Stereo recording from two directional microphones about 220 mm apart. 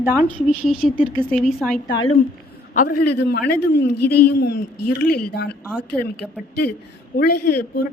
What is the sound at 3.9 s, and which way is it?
Speech, 90° left.